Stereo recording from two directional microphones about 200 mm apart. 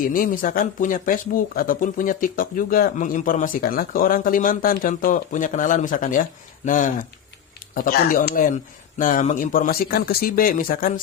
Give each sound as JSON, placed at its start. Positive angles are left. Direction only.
{"t": 0.0, "sound": "speech", "side_deg": 45}